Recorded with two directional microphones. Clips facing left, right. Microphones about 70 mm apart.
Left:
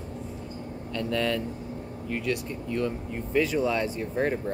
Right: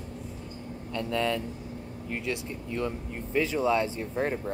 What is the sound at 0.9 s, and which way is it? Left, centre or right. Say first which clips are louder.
Speech: left 1 dB; right.